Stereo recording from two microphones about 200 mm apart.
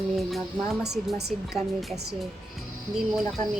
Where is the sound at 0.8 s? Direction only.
Centre (ahead or behind).